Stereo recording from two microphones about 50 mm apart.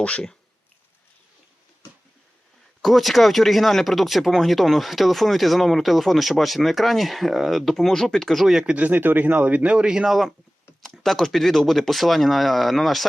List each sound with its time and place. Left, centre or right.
0.0 s speech: left
2.8 s speech: centre
8.6 s speech: right
9.4 s speech: right
10.1 s speech: centre